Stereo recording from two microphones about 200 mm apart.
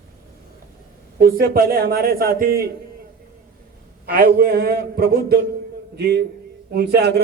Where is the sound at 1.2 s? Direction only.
50° right (ahead or behind).